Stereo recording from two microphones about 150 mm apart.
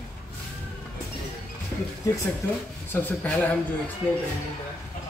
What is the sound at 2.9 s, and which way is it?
Speech, 10° left (ahead or behind).